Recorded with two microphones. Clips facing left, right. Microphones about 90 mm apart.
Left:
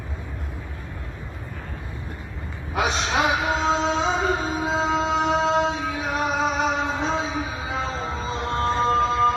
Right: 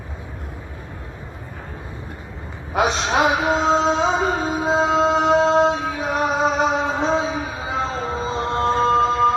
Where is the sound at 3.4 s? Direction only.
25° right (ahead or behind).